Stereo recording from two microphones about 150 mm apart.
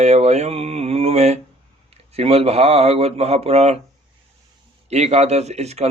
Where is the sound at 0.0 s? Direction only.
50° right (ahead or behind).